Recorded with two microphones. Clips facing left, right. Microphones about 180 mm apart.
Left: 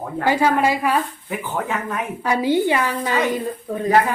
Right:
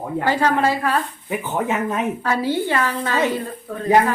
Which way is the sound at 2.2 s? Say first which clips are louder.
Left 7 dB; 15° left (ahead or behind).